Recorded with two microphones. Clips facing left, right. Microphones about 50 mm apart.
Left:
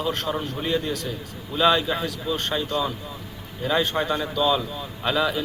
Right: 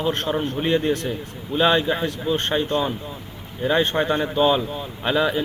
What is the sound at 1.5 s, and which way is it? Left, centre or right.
A man's voice, right.